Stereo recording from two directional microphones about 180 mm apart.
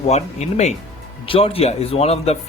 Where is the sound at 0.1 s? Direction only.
35° left (ahead or behind).